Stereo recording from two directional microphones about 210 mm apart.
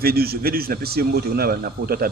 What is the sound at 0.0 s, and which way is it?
A man's voice, 45° right (ahead or behind).